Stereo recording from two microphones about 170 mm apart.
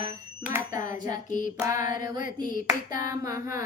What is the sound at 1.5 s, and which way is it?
Music, 20° right (ahead or behind).